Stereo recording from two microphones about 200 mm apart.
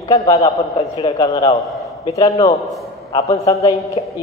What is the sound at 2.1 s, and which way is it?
A man's voice, 15° left (ahead or behind).